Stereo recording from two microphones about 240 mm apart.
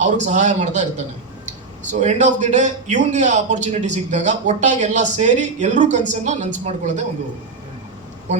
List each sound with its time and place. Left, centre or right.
0.0 s a man's voice: right